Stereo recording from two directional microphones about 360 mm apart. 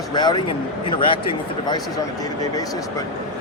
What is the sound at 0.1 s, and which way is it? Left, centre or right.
Speech, centre.